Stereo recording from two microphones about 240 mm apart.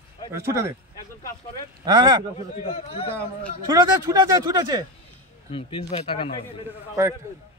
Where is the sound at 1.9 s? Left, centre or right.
Centre.